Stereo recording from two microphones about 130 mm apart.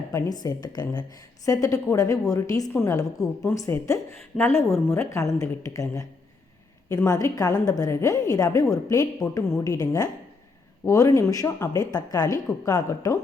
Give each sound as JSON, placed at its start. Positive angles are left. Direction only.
{"t": 0.1, "sound": "a woman's voice", "side_deg": 25}